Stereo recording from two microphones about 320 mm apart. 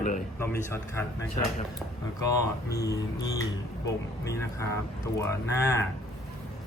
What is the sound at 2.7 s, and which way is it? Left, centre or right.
Speech, centre.